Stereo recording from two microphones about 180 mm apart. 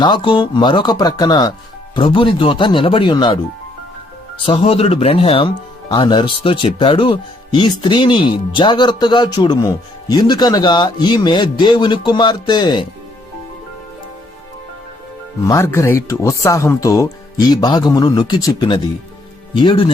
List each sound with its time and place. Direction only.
0.0 s speech: 25° left (ahead or behind)
4.4 s speech: 30° left (ahead or behind)
15.4 s speech: 15° left (ahead or behind)